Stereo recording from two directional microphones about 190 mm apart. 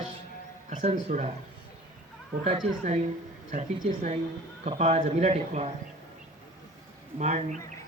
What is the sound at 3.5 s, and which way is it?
Speech, 35° right (ahead or behind).